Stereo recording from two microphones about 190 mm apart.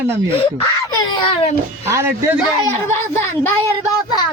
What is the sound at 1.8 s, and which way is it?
Speech, 15° right (ahead or behind).